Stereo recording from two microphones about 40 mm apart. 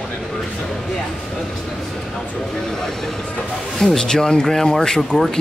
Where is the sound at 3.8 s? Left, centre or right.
Centre.